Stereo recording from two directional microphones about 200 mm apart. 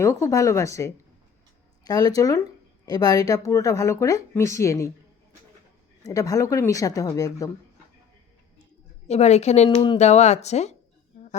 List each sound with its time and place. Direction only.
0.0 s speech: 15° left (ahead or behind)
6.1 s speech: 15° left (ahead or behind)
9.0 s speech: 35° left (ahead or behind)